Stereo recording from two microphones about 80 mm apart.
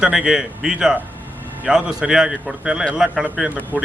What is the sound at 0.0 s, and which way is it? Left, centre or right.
A man's voice, centre.